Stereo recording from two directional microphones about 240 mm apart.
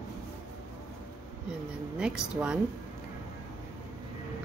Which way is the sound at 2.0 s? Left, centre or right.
Centre.